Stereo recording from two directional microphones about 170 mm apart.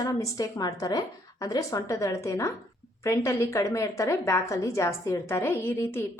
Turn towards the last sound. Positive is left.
turn(degrees=15)  # may be behind; listen again after turning